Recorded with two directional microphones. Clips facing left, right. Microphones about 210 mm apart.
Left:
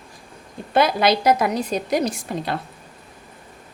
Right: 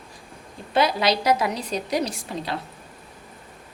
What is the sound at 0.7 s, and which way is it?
A woman's voice, 50° left (ahead or behind).